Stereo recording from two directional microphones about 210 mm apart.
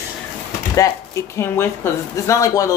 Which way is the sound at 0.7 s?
15° left (ahead or behind).